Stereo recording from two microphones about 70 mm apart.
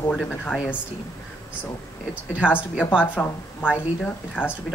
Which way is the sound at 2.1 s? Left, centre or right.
Centre.